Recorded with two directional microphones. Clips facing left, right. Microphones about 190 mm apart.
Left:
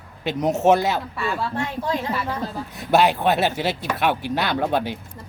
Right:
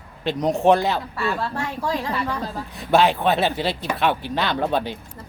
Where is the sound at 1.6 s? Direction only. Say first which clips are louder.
Left 1 dB; 20° left (ahead or behind).